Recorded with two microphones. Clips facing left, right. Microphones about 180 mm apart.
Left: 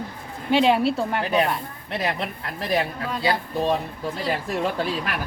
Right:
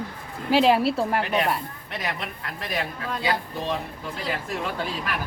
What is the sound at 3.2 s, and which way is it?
Speech, 40° left (ahead or behind).